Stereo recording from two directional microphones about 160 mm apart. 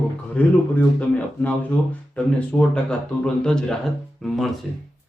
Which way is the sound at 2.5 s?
15° left (ahead or behind).